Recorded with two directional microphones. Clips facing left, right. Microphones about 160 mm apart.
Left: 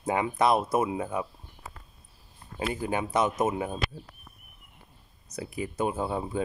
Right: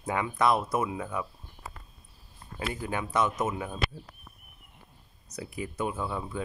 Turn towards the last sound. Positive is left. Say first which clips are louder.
# left 4 dB
turn(degrees=35)  # may be behind; listen again after turning